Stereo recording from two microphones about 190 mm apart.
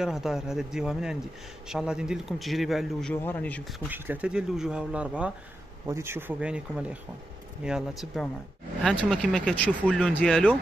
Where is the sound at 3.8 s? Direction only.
10° right (ahead or behind).